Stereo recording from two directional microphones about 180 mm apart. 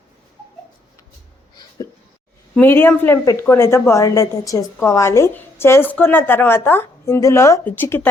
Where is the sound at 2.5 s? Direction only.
10° left (ahead or behind).